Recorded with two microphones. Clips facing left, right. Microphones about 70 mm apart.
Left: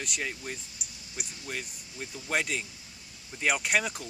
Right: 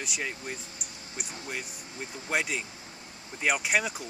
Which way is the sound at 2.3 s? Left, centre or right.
Centre.